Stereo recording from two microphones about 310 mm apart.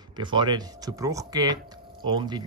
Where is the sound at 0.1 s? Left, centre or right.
Centre.